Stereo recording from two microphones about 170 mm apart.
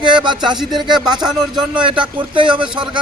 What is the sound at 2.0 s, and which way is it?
Speech, 30° right (ahead or behind).